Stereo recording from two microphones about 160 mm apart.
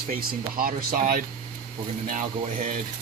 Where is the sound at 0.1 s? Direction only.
65° right (ahead or behind).